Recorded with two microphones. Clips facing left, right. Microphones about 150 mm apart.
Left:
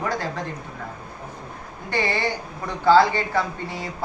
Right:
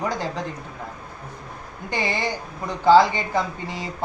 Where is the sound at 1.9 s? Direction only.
15° right (ahead or behind).